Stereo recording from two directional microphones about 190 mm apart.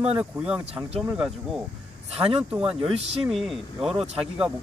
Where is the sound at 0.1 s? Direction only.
5° right (ahead or behind).